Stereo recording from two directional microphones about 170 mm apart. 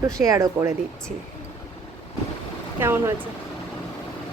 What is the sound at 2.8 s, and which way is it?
Speech, 15° right (ahead or behind).